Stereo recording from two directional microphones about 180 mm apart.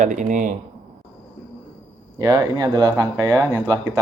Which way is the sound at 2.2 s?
20° right (ahead or behind).